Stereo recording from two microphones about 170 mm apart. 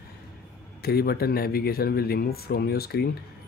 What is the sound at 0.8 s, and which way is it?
Speech, 65° left (ahead or behind).